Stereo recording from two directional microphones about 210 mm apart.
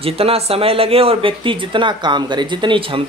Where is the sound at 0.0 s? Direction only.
30° right (ahead or behind).